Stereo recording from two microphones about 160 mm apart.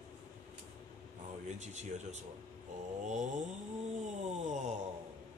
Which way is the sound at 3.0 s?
45° right (ahead or behind).